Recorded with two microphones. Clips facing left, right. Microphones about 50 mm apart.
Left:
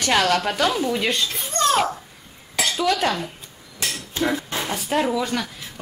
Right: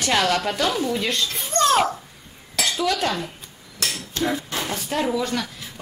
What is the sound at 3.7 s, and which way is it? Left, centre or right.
Dishes, centre.